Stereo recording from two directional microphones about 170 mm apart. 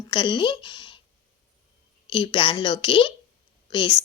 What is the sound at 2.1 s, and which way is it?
Speech, 30° left (ahead or behind).